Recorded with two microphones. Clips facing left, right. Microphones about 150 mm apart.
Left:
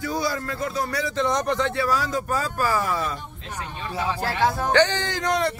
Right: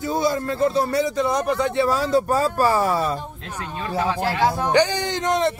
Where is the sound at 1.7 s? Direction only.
25° right (ahead or behind).